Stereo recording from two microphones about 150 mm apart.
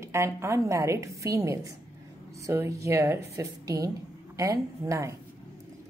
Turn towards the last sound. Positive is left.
turn(degrees=-20)  # may be behind; listen again after turning